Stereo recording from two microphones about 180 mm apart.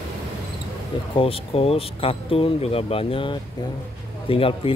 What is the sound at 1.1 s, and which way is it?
Speech, 30° left (ahead or behind).